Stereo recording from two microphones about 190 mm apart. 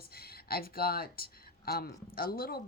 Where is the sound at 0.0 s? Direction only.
55° left (ahead or behind).